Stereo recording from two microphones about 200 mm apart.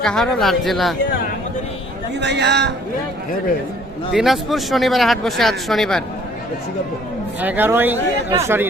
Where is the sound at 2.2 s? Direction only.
60° right (ahead or behind).